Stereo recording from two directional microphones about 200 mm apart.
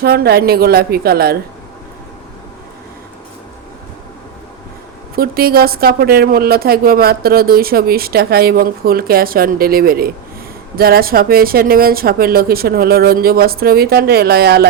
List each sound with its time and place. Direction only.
0.0 s a woman's voice: 50° right (ahead or behind)
5.1 s a woman's voice: 50° right (ahead or behind)